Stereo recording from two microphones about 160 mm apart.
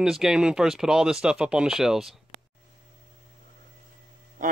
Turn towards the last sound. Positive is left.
turn(degrees=-55)  # may be behind; listen again after turning